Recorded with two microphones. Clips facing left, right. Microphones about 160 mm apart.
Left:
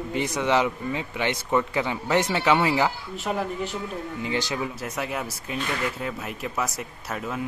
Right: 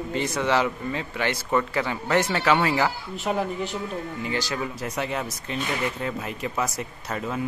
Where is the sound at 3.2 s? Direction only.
Centre (ahead or behind).